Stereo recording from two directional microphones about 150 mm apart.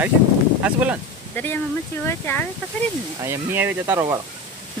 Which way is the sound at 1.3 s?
15° left (ahead or behind).